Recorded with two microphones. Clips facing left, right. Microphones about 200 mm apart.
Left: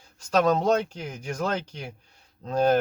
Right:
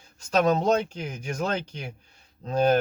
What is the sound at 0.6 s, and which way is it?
Speech, 20° right (ahead or behind).